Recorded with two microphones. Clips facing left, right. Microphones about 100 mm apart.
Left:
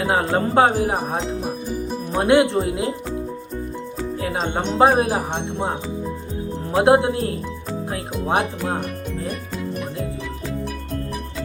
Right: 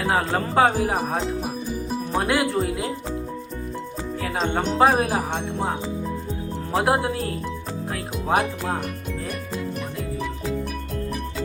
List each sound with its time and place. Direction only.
0.0 s speech: 25° left (ahead or behind)
4.2 s speech: 25° left (ahead or behind)
6.7 s speech: 25° left (ahead or behind)